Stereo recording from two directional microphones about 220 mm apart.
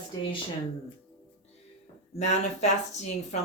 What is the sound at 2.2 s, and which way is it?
Speech, 30° left (ahead or behind).